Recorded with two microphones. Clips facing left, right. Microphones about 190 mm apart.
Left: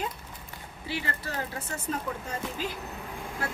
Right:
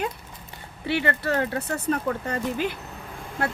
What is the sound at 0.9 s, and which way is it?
Speech, 65° right (ahead or behind).